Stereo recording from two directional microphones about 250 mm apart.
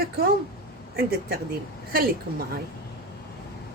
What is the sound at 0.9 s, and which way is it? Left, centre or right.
Speech, right.